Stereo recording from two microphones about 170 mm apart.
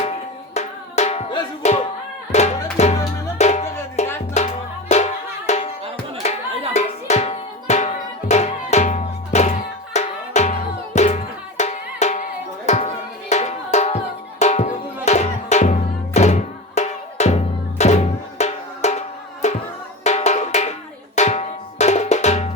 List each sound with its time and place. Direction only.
0.5 s music: 40° left (ahead or behind)
20.1 s drum: 40° left (ahead or behind)